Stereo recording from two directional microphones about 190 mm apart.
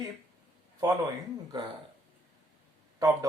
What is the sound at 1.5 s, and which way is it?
Speech, 20° right (ahead or behind).